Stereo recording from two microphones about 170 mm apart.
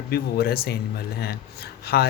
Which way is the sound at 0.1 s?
65° left (ahead or behind).